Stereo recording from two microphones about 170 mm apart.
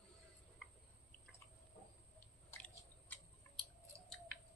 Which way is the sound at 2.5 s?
5° left (ahead or behind).